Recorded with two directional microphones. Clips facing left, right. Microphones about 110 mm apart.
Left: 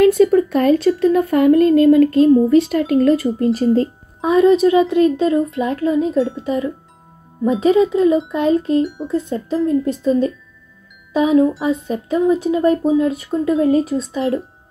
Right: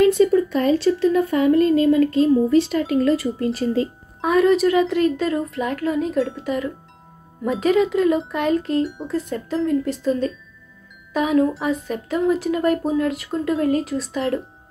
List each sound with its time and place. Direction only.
0.0 s speech: 50° left (ahead or behind)
4.2 s a woman's voice: 20° left (ahead or behind)